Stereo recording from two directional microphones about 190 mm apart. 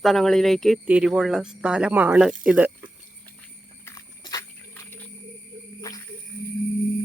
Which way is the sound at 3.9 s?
20° left (ahead or behind).